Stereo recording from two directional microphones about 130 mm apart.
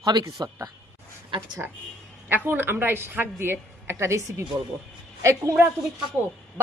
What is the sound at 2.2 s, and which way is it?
A woman's voice, 15° right (ahead or behind).